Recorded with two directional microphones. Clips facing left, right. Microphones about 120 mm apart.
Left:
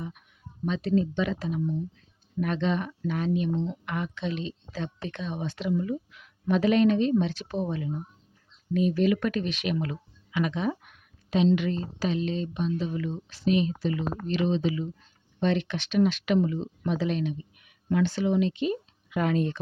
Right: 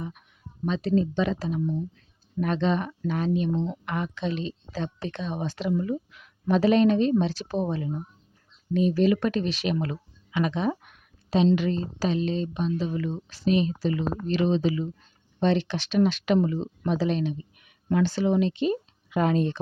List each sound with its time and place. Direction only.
0.6 s speech: 35° right (ahead or behind)
9.7 s a sound: 35° right (ahead or behind)
11.5 s speech: 35° right (ahead or behind)